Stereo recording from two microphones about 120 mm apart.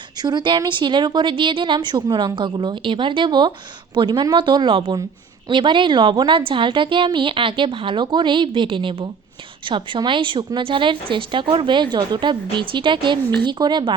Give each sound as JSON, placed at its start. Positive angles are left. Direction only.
{"t": 0.2, "sound": "a woman's voice", "side_deg": -40}